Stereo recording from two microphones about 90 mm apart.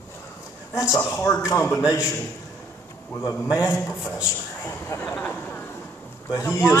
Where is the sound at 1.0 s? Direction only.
25° left (ahead or behind).